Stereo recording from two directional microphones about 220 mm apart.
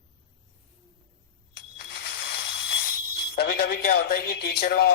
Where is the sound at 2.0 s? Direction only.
45° left (ahead or behind).